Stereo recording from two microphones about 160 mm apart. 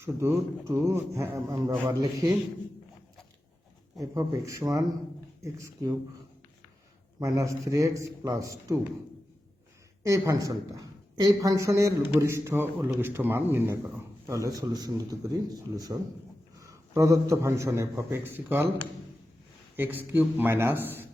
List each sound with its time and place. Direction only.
0.0 s a man's voice: 15° right (ahead or behind)
4.0 s a man's voice: 20° right (ahead or behind)
7.2 s a man's voice: 20° right (ahead or behind)
10.1 s a man's voice: 20° right (ahead or behind)
19.7 s speech: 10° right (ahead or behind)